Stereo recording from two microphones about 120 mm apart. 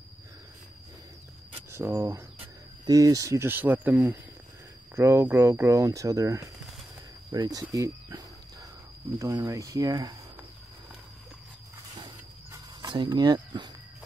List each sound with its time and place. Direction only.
1.7 s speech: 20° right (ahead or behind)
2.9 s speech: 30° right (ahead or behind); by 3.9 s 15° right (ahead or behind)
4.9 s speech: 20° right (ahead or behind)
7.3 s speech: 40° right (ahead or behind)
7.7 s speech: 30° right (ahead or behind)
12.8 s speech: 40° right (ahead or behind)